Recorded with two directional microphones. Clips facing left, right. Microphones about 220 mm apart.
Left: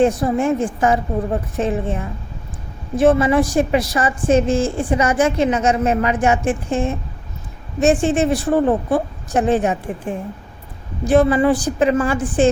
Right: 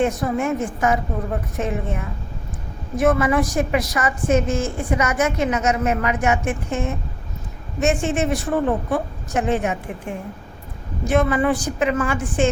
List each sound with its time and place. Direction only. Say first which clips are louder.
0.0 s a woman's voice: left 5 dB; 30° left (ahead or behind)